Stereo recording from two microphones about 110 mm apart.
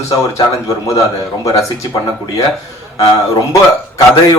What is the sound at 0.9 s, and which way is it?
Speech, 30° left (ahead or behind).